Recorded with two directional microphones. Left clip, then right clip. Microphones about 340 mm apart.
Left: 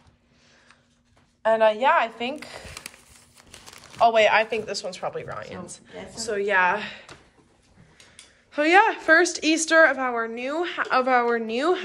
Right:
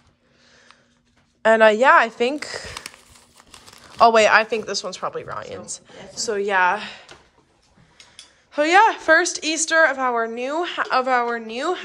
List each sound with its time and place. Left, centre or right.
1.4 s speech: centre
4.0 s a woman's voice: centre
8.5 s a woman's voice: centre